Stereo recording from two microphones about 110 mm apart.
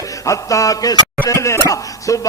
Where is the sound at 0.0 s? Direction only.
30° left (ahead or behind).